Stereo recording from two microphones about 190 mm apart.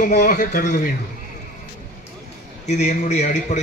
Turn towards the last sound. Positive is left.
turn(degrees=40)  # may be behind; listen again after turning